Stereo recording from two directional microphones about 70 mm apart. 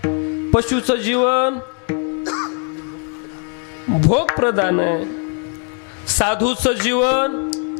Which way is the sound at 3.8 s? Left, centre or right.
Left.